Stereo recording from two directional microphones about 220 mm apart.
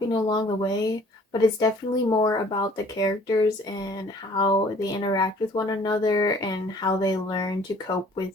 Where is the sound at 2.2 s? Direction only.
20° left (ahead or behind).